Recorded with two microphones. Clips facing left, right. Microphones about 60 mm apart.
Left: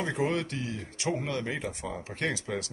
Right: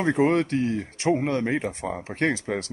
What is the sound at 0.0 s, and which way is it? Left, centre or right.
Speech, right.